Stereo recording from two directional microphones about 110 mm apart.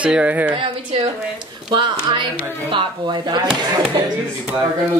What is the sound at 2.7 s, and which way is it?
Speech, 45° right (ahead or behind).